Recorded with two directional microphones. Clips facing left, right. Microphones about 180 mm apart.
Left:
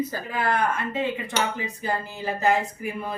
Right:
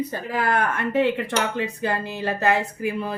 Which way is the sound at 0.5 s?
70° right (ahead or behind).